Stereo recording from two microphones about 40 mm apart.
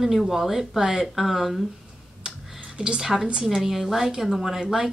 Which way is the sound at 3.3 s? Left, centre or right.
Right.